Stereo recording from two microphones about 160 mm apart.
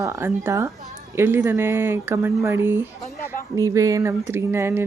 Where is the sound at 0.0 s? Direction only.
20° right (ahead or behind).